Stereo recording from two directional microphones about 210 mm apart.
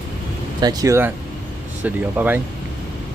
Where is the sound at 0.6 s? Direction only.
20° right (ahead or behind).